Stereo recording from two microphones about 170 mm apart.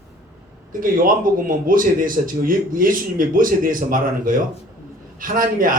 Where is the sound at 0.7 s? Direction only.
55° right (ahead or behind).